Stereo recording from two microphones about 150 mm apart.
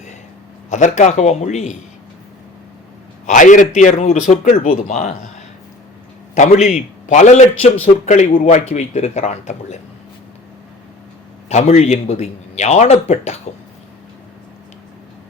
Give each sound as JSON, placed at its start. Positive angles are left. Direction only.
{"t": 0.7, "sound": "a man's voice", "side_deg": 55}
{"t": 3.2, "sound": "a man's voice", "side_deg": 60}
{"t": 6.3, "sound": "a man's voice", "side_deg": 55}
{"t": 11.4, "sound": "a man's voice", "side_deg": 45}